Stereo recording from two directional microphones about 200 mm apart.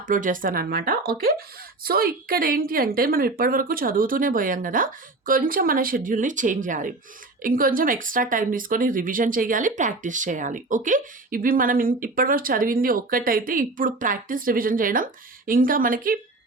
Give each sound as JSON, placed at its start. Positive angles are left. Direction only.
{"t": 0.1, "sound": "speech", "side_deg": -40}